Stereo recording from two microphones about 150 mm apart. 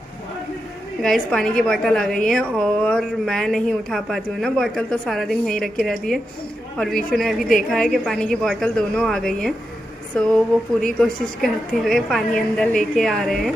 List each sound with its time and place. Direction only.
1.0 s a woman's voice: 5° left (ahead or behind)